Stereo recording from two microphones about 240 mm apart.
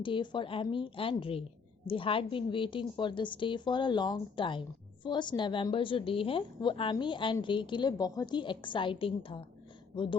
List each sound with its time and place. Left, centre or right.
0.0 s a woman's voice: centre